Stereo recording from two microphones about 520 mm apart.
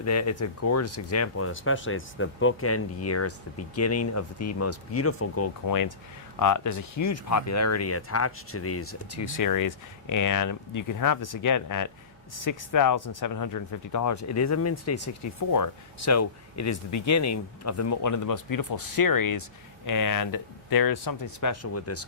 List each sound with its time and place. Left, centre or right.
0.0 s speech: left